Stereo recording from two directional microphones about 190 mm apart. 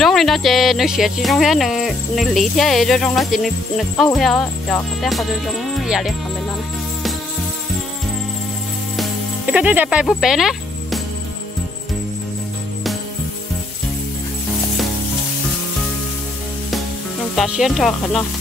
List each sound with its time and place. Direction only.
0.0 s speech: centre (ahead or behind)
8.9 s music: 5° right (ahead or behind)
17.4 s speech: centre (ahead or behind)